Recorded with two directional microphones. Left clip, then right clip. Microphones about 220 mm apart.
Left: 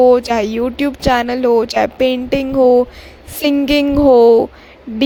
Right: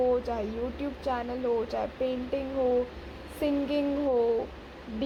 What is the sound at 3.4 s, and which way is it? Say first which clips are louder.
A woman's voice: left 14 dB; 50° left (ahead or behind).